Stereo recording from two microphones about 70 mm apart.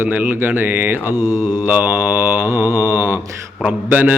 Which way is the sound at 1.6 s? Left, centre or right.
Right.